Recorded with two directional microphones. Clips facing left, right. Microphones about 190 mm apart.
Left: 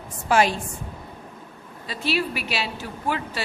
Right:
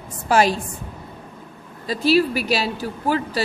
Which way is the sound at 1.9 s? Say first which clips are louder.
Right 8 dB; 40° right (ahead or behind).